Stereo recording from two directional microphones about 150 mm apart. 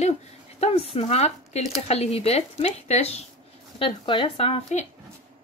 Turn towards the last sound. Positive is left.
turn(degrees=35)  # may be behind; listen again after turning